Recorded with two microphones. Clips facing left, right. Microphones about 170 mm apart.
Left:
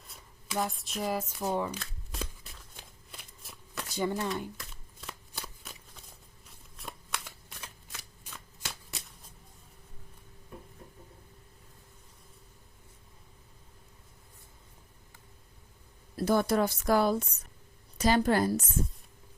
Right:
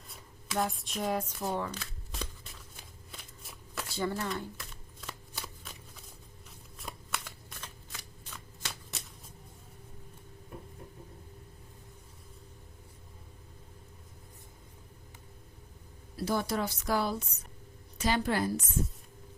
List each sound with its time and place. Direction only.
0.1 s speech: centre (ahead or behind)
1.8 s shuffling cards: centre (ahead or behind)
3.8 s speech: 15° left (ahead or behind)
4.5 s shuffling cards: centre (ahead or behind)
6.7 s shuffling cards: centre (ahead or behind)
16.1 s a woman's voice: 55° left (ahead or behind)